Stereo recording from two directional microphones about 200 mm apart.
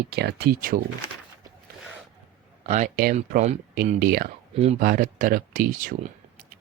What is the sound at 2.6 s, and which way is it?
Speech, 35° right (ahead or behind).